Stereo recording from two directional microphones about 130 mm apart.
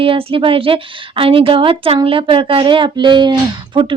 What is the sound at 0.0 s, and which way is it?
A woman's voice, 45° right (ahead or behind).